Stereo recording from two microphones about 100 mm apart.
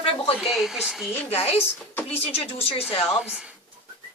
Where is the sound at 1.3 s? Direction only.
85° left.